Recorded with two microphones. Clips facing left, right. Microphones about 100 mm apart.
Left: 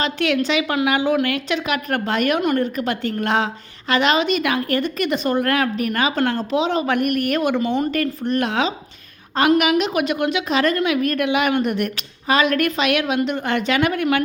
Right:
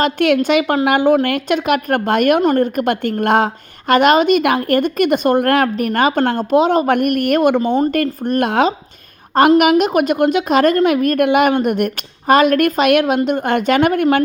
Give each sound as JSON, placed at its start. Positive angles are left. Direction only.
{"t": 0.0, "sound": "a woman's voice", "side_deg": -50}
{"t": 2.4, "sound": "a woman's voice", "side_deg": -40}
{"t": 2.7, "sound": "a woman's voice", "side_deg": -55}